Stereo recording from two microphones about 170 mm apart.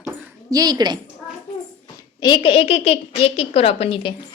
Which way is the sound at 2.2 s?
30° left (ahead or behind).